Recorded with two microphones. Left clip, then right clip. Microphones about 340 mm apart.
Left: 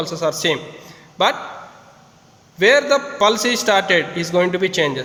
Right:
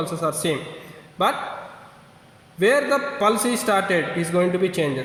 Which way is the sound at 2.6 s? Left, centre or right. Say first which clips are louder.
Left 5 dB; left.